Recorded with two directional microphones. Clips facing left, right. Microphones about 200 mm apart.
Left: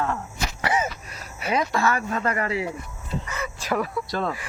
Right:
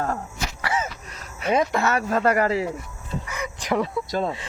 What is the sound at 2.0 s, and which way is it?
Speech, 40° right (ahead or behind).